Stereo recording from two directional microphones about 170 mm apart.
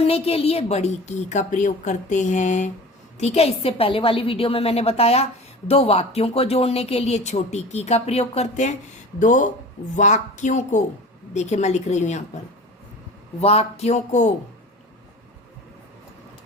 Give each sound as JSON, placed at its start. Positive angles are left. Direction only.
{"t": 0.0, "sound": "a woman's voice", "side_deg": 35}
{"t": 13.4, "sound": "a woman's voice", "side_deg": 35}